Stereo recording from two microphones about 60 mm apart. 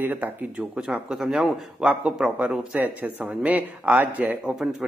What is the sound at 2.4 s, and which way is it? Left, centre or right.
A man's voice, right.